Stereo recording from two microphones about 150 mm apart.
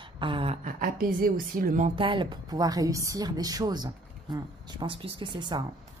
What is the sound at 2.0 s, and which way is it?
A woman's voice, 35° right (ahead or behind).